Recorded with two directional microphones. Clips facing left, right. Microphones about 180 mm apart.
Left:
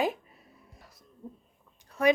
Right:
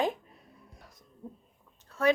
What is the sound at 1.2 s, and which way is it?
Speech, centre (ahead or behind).